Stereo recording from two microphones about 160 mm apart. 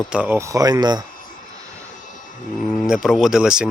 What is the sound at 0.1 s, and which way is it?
Speech, 10° right (ahead or behind).